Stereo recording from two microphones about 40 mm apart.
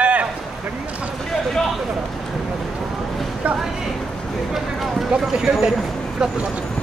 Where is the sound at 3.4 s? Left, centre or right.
Right.